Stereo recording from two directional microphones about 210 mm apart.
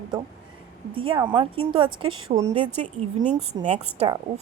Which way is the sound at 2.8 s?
35° right (ahead or behind).